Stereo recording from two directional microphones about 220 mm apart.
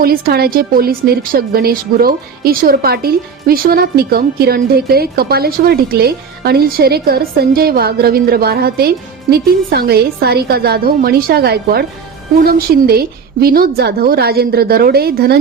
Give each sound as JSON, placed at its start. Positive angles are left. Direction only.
{"t": 0.0, "sound": "a woman's voice", "side_deg": -45}